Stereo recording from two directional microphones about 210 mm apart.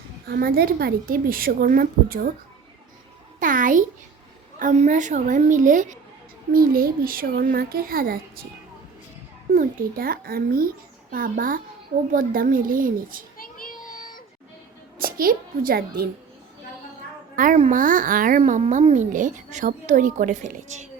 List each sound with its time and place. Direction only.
0.3 s a woman's voice: 45° right (ahead or behind)
3.4 s a child's voice: 40° right (ahead or behind)
9.5 s a woman's voice: 40° right (ahead or behind)
13.3 s child singing: 40° left (ahead or behind)
14.9 s a child's voice: 45° right (ahead or behind)
17.3 s a child's voice: 40° right (ahead or behind)